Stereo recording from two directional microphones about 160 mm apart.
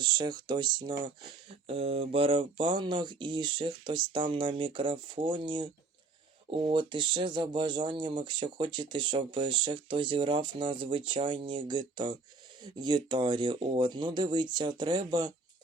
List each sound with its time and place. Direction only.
0.0 s speech: 30° right (ahead or behind)